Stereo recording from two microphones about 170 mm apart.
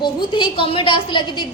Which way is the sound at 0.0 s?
25° left (ahead or behind).